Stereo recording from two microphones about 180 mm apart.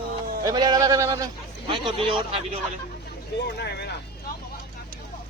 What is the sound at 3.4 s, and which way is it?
Speech, 65° left (ahead or behind).